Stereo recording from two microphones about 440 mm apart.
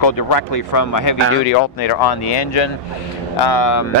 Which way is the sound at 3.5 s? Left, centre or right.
Left.